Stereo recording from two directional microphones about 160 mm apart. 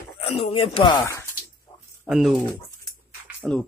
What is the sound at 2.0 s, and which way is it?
Speech, centre (ahead or behind).